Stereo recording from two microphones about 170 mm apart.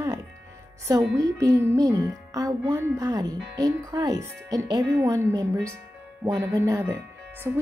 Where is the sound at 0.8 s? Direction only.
20° right (ahead or behind).